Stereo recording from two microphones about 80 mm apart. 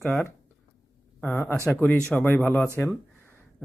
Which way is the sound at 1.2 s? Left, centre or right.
Centre.